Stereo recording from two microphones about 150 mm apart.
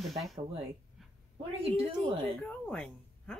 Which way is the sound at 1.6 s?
40° right (ahead or behind).